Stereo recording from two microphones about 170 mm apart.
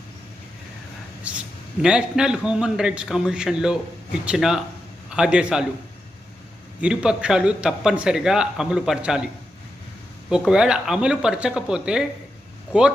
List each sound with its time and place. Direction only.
1.3 s a sound: 5° right (ahead or behind)
1.8 s a man's voice: 5° right (ahead or behind)
6.8 s speech: 5° right (ahead or behind)